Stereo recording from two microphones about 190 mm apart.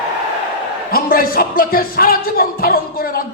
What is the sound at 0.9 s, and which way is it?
Music, 50° left (ahead or behind).